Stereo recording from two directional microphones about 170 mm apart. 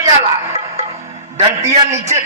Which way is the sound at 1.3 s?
40° right (ahead or behind).